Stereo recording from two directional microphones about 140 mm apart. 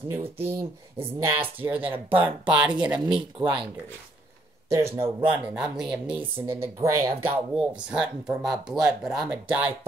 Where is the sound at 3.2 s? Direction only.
35° right (ahead or behind).